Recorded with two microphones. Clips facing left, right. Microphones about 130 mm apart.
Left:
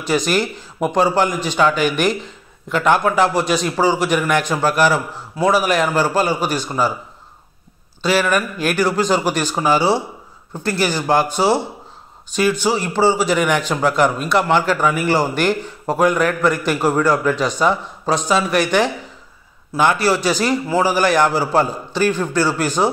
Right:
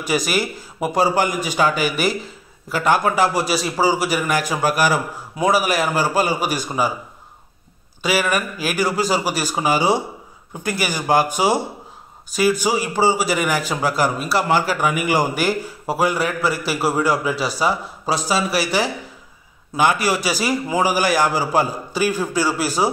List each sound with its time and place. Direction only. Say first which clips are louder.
0.0 s a man's voice: left 3 dB; 10° right (ahead or behind)
8.0 s a man's voice: left 3 dB; 10° right (ahead or behind)